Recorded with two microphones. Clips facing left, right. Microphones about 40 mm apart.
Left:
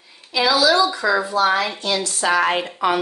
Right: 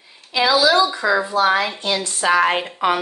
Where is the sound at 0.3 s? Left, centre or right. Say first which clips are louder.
Right 1 dB; right.